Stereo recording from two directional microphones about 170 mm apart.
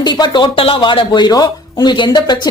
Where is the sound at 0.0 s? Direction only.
25° left (ahead or behind).